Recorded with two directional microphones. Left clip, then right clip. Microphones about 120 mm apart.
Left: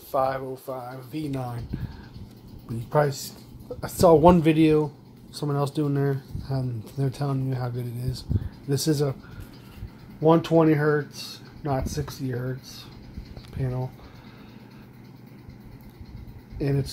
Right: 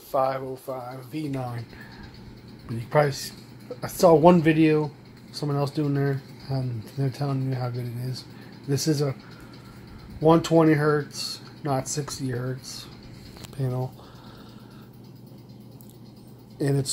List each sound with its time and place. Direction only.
0.1 s speech: 10° left (ahead or behind)
2.9 s speech: 10° left (ahead or behind)
10.2 s speech: centre (ahead or behind)
16.5 s speech: 15° right (ahead or behind)